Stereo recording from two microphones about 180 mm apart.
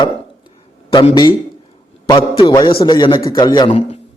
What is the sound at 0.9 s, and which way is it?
A man's voice, 25° left (ahead or behind).